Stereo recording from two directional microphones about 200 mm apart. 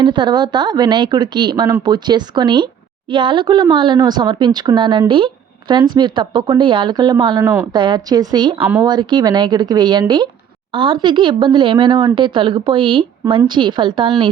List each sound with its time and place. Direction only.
0.0 s speech: 20° right (ahead or behind)
8.6 s speech: 10° right (ahead or behind)
8.9 s speech: 20° right (ahead or behind)